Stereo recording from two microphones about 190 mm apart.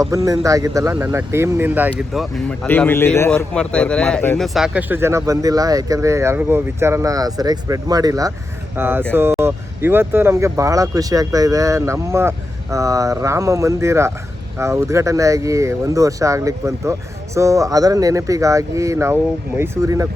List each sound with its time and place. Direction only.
0.0 s speech: 15° right (ahead or behind)
2.5 s a man's voice: 10° left (ahead or behind)
4.4 s speech: centre (ahead or behind)